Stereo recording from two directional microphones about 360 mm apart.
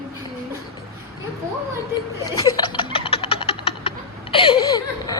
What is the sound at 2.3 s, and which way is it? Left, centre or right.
Music, centre.